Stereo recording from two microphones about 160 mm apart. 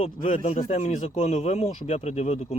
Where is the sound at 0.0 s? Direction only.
45° left (ahead or behind).